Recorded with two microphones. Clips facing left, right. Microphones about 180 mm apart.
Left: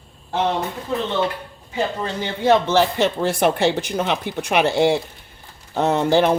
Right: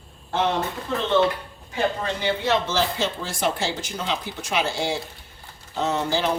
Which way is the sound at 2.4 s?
55° left (ahead or behind).